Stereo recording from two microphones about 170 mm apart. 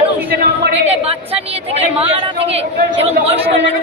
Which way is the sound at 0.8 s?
35° right (ahead or behind).